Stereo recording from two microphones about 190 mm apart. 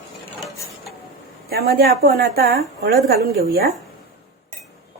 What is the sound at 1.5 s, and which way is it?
Speech, 55° right (ahead or behind).